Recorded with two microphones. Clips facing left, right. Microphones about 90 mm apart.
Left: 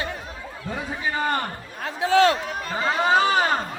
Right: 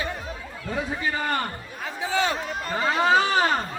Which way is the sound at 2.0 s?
90° left.